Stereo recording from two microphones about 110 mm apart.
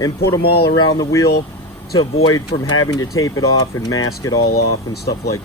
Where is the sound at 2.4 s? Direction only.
45° left (ahead or behind).